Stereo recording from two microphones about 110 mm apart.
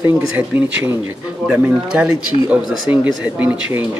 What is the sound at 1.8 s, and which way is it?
Speech, 10° right (ahead or behind).